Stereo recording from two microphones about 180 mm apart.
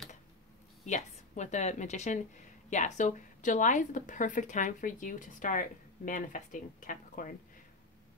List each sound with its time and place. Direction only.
0.8 s a woman's voice: 40° left (ahead or behind)